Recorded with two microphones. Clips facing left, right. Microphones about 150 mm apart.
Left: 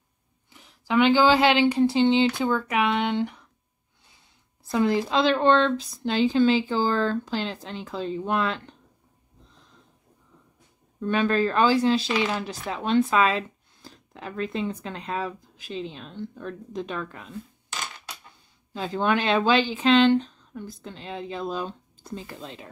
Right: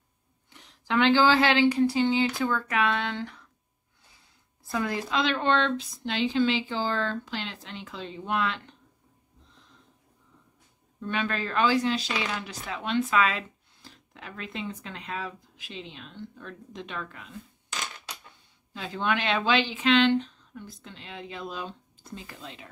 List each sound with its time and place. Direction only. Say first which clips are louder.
0.5 s speech: left 3 dB; 5° left (ahead or behind)
4.7 s speech: left 6 dB; 30° left (ahead or behind)
11.0 s speech: left 8 dB; 40° left (ahead or behind)
18.7 s speech: left 5 dB; 35° left (ahead or behind)